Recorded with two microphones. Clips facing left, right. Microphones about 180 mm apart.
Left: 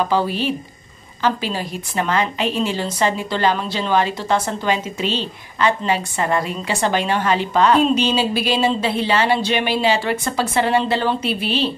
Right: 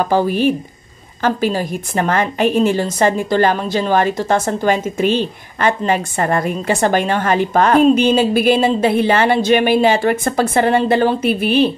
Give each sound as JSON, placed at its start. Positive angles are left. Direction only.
{"t": 0.1, "sound": "a woman's voice", "side_deg": -50}